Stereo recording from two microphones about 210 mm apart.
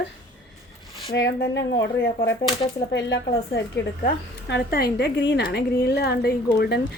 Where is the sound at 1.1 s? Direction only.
55° left (ahead or behind).